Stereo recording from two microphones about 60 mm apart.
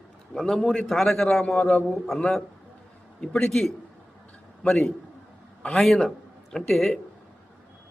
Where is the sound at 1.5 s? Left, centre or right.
Centre.